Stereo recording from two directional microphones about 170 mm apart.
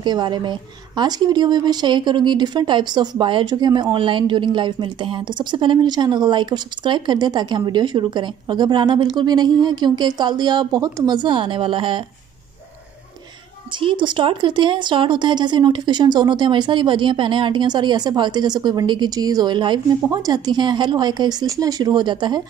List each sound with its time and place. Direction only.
0.0 s speech: 25° right (ahead or behind)
13.7 s speech: 30° right (ahead or behind)